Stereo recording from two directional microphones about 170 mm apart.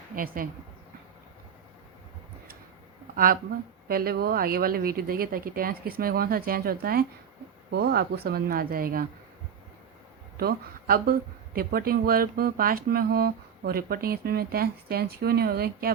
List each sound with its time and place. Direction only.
0.4 s a woman's voice: 55° right (ahead or behind)
3.8 s a woman's voice: 65° right (ahead or behind)
7.7 s a woman's voice: 75° right (ahead or behind); by 9.0 s 60° right (ahead or behind)
10.3 s a woman's voice: 60° right (ahead or behind)